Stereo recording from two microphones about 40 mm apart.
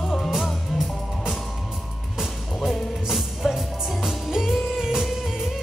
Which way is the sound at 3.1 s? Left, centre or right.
Centre.